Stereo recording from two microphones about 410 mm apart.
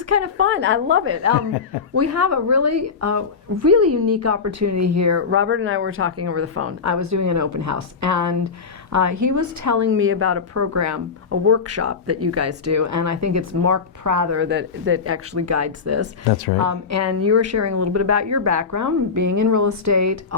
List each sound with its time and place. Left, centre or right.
0.1 s a woman's voice: right
9.9 s a woman's voice: right
14.3 s a woman's voice: right